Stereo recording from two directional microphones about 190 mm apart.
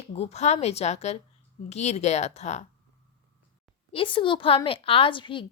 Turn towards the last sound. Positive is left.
turn(degrees=25)  # may be behind; listen again after turning